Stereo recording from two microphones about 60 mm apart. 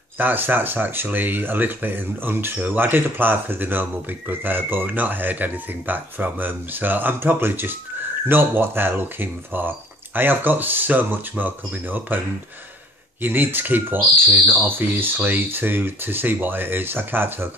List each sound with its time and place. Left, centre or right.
0.2 s speech: right
13.2 s speech: right